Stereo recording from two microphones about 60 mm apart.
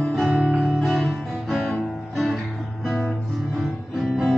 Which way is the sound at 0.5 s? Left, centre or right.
Centre.